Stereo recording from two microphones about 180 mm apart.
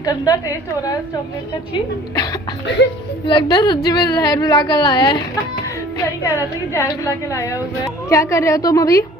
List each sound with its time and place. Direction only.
0.0 s a woman's voice: 20° left (ahead or behind)
3.3 s a woman's voice: 25° left (ahead or behind)